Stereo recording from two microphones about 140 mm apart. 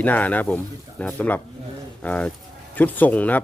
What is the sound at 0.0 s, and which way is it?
Speech, 10° left (ahead or behind).